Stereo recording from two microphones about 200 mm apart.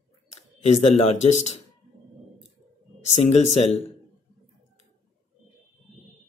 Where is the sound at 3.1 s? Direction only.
35° left (ahead or behind).